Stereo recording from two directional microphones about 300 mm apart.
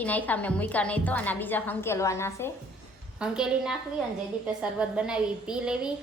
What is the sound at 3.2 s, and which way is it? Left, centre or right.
A woman's voice, centre.